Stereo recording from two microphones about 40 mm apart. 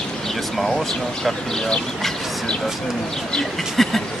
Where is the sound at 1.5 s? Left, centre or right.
Centre.